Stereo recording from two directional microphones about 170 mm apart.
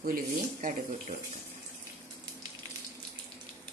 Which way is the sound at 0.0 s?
55° right (ahead or behind).